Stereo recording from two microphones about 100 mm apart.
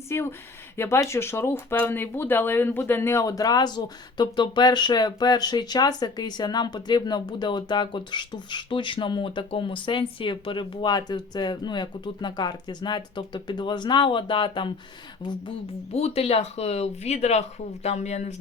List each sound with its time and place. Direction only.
0.1 s speech: 25° left (ahead or behind); by 15.5 s 50° left (ahead or behind)
15.9 s speech: 90° left